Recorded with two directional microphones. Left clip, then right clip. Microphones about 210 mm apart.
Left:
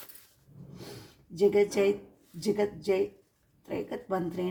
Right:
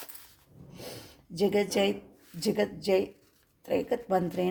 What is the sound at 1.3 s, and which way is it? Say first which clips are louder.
Speech: left 2 dB; 55° right (ahead or behind).